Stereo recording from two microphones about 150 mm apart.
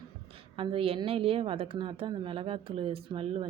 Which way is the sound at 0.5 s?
35° right (ahead or behind).